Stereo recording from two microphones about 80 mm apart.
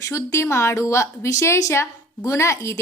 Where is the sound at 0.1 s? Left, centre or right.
Left.